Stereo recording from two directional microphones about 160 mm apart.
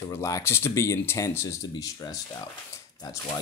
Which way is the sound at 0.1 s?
15° left (ahead or behind).